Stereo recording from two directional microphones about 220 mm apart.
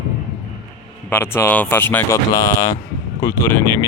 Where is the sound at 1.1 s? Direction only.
10° left (ahead or behind).